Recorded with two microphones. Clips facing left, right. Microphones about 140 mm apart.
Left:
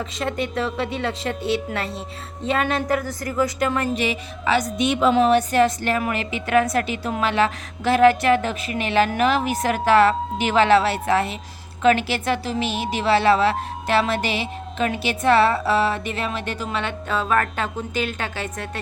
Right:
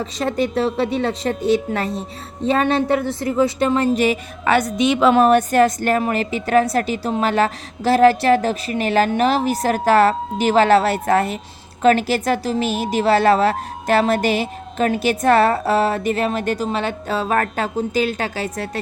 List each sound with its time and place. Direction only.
0.0 s a woman's voice: 35° right (ahead or behind)
3.9 s music: 45° right (ahead or behind); by 5.2 s 85° right
5.2 s a woman's voice: 50° right (ahead or behind)